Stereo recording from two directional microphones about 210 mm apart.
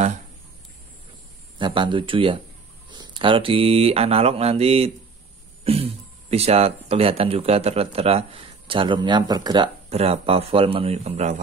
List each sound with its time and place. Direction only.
1.6 s speech: 25° right (ahead or behind)
5.6 s throat clearing: 30° right (ahead or behind)
6.3 s speech: 30° right (ahead or behind)